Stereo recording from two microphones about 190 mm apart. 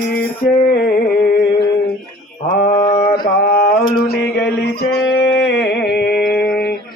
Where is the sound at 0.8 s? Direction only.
50° left (ahead or behind).